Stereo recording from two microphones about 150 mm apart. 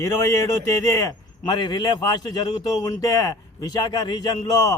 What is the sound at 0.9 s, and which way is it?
A man's voice, 25° left (ahead or behind).